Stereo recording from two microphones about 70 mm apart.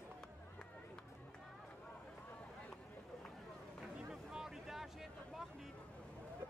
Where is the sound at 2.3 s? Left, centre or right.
Centre.